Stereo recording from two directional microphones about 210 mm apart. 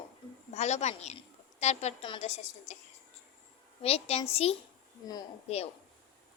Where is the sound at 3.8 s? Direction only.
30° left (ahead or behind).